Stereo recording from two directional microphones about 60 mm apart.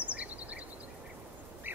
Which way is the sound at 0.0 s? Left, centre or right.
Right.